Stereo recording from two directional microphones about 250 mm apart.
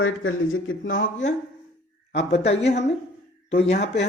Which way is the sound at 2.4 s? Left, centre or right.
Left.